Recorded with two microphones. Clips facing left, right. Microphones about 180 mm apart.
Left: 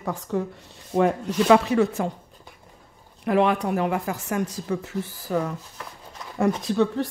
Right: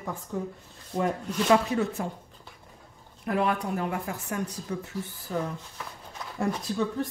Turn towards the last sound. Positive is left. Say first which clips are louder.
# left 6 dB
turn(degrees=80)